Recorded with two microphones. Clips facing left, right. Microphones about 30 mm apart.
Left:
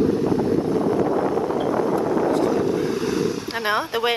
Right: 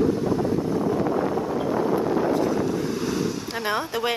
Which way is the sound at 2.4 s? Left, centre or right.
Centre.